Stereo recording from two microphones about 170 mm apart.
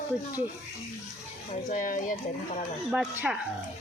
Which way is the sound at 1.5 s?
50° left (ahead or behind).